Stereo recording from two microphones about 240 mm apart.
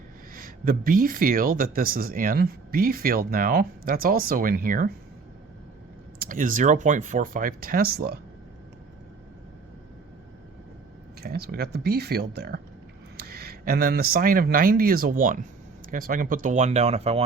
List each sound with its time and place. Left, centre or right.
0.3 s speech: right
6.1 s speech: right
11.2 s speech: right